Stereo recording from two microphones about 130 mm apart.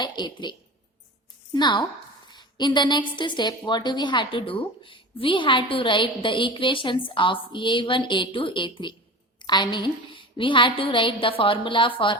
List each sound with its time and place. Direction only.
0.0 s speech: 35° left (ahead or behind)
1.5 s a woman's voice: 35° left (ahead or behind)